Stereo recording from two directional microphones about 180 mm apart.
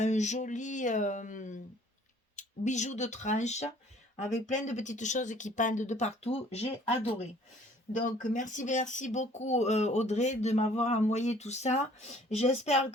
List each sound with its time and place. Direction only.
0.0 s speech: 40° left (ahead or behind)